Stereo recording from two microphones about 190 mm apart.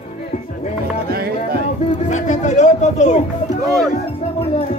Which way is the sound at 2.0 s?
40° left (ahead or behind).